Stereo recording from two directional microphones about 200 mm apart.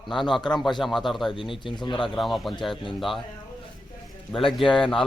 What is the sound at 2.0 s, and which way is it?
Speech, centre (ahead or behind).